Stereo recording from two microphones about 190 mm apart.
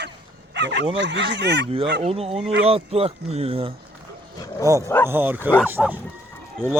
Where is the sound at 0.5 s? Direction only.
65° right (ahead or behind).